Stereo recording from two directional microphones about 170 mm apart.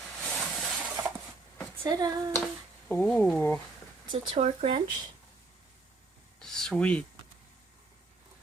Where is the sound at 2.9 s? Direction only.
10° left (ahead or behind).